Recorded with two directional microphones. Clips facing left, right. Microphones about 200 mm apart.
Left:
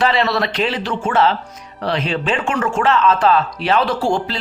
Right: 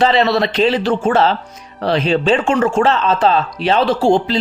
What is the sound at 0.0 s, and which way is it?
Speech, 25° right (ahead or behind).